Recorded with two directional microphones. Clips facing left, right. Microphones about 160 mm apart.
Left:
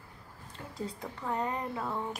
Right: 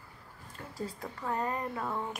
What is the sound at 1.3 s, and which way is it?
Speech, 15° left (ahead or behind).